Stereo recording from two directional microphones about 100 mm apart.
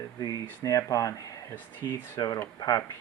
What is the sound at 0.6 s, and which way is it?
Speech, 35° left (ahead or behind).